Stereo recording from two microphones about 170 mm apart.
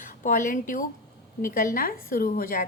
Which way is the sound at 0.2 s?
50° left (ahead or behind).